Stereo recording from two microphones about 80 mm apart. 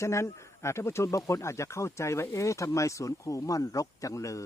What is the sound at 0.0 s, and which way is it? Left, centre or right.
Speech, left.